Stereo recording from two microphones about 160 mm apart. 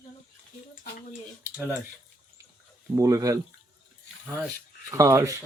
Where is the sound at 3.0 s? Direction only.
20° right (ahead or behind).